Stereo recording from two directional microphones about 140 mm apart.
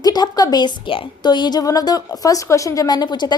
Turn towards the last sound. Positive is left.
turn(degrees=30)  # may be behind; listen again after turning